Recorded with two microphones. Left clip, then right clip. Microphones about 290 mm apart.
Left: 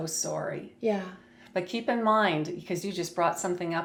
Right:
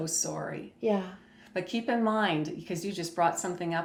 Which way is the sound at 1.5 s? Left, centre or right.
Left.